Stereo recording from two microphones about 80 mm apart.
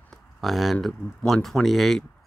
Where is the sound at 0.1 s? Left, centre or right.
Centre.